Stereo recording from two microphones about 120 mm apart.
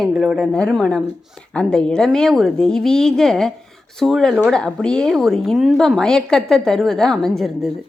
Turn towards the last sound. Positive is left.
turn(degrees=0)  # may be behind; listen again after turning